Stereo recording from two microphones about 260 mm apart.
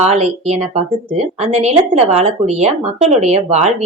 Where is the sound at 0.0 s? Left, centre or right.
Right.